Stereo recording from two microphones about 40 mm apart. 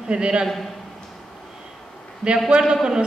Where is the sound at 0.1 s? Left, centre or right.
Right.